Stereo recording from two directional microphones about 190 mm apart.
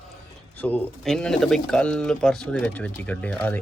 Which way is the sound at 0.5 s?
10° left (ahead or behind).